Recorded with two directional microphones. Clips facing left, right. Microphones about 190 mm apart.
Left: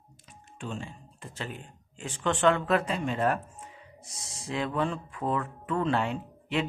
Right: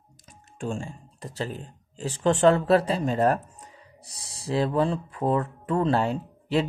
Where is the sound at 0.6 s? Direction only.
45° right (ahead or behind).